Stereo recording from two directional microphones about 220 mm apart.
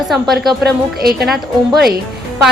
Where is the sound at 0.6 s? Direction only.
45° right (ahead or behind).